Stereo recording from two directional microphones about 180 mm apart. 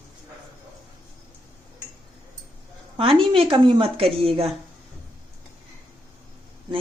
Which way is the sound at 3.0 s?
30° right (ahead or behind).